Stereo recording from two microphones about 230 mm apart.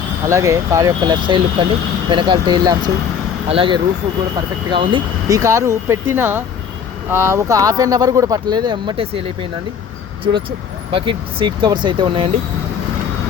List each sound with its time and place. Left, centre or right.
0.3 s speech: centre
10.9 s speech: right